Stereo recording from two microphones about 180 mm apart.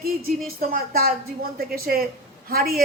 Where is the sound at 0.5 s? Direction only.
55° right (ahead or behind).